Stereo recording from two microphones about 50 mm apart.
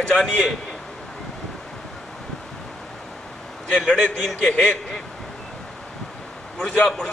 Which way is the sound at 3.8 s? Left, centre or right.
Centre.